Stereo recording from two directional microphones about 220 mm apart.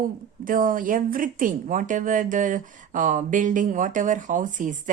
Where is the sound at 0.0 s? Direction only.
40° right (ahead or behind).